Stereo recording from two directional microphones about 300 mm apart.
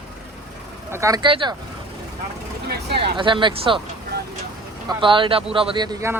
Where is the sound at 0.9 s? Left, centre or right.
Centre.